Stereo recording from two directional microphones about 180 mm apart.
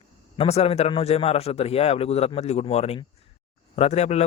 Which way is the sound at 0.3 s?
35° left (ahead or behind).